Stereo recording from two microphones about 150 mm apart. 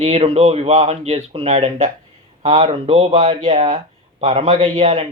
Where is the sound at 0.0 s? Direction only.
40° right (ahead or behind).